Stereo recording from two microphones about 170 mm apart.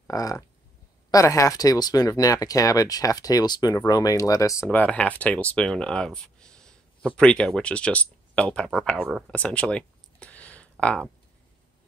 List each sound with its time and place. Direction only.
0.0 s speech: 20° left (ahead or behind)
4.6 s speech: 10° left (ahead or behind)
9.3 s a sound: 5° left (ahead or behind)